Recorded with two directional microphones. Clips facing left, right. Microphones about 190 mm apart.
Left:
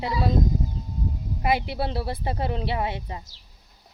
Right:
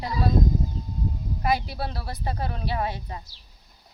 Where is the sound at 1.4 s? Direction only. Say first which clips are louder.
Left 2 dB; 25° left (ahead or behind).